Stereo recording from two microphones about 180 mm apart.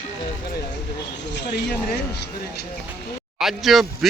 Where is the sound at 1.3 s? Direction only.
70° left (ahead or behind).